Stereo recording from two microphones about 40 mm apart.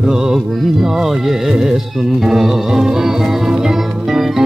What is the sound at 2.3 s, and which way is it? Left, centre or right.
Music, centre.